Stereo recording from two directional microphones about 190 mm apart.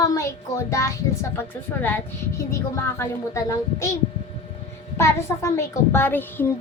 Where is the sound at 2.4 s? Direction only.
15° left (ahead or behind).